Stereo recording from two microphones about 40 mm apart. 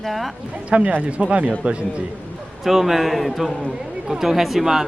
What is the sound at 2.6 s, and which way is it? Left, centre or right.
Speech, centre.